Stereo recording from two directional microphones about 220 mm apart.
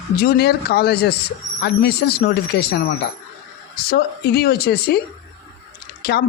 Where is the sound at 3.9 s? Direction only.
45° left (ahead or behind).